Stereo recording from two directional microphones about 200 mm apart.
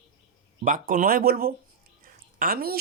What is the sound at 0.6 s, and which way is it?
Speech, 45° right (ahead or behind).